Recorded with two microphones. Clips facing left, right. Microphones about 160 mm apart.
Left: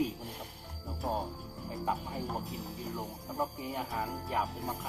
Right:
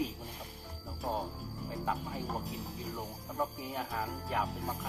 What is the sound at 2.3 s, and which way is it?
Music, centre (ahead or behind).